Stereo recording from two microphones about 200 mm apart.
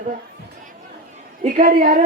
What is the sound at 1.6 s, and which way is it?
Speech, 45° right (ahead or behind).